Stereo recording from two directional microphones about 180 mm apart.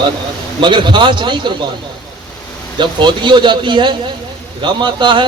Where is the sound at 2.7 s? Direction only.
25° right (ahead or behind).